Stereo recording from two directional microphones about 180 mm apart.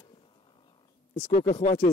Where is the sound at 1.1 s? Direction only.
35° left (ahead or behind).